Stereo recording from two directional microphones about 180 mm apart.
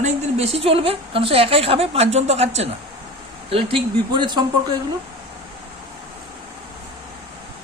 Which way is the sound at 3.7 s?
25° right (ahead or behind).